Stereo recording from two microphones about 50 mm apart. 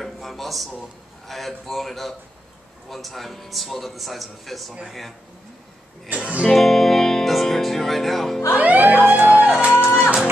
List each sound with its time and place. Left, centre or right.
0.0 s a sound: centre
0.7 s a man's voice: centre
6.1 s speech: centre
6.4 s music: centre
8.5 s music: right
9.8 s music: left